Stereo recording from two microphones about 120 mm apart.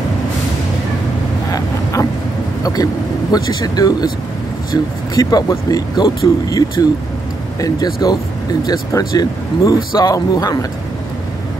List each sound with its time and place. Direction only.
1.5 s vehicle: 30° left (ahead or behind)
2.6 s speech: 30° left (ahead or behind)